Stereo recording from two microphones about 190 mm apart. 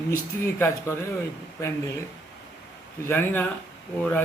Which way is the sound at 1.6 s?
15° left (ahead or behind).